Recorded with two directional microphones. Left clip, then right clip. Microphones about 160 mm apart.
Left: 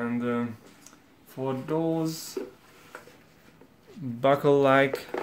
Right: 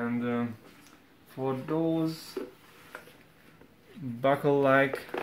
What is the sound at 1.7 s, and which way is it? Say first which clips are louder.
Speech: left 2 dB; 20° left (ahead or behind).